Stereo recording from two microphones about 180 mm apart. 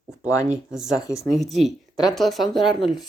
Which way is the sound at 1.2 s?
Centre (ahead or behind).